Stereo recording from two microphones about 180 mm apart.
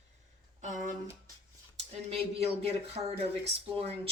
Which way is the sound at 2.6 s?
35° right (ahead or behind).